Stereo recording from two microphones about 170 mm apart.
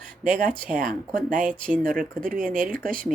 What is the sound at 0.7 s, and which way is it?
Speech, 55° right (ahead or behind).